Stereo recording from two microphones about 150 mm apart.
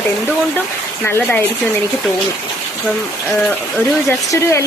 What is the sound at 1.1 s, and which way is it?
Speech, 15° left (ahead or behind).